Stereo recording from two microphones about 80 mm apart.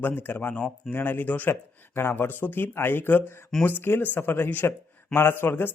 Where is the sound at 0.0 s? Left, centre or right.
Left.